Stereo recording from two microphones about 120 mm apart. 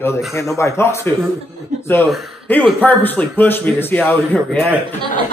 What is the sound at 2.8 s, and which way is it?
A man's voice, 15° left (ahead or behind).